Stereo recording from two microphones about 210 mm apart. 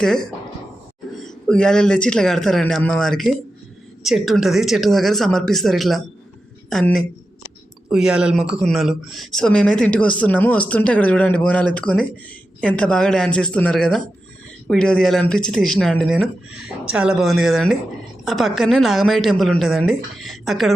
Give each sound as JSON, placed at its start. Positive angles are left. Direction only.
{"t": 0.0, "sound": "speech", "side_deg": 5}